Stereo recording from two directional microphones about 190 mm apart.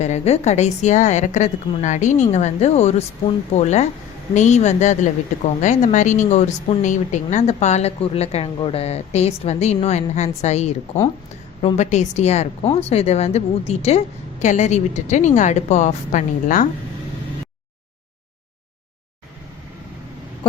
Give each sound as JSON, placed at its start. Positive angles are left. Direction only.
{"t": 0.0, "sound": "speech", "side_deg": 35}